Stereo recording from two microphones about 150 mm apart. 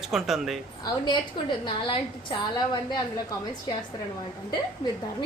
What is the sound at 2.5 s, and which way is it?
Speech, 30° left (ahead or behind).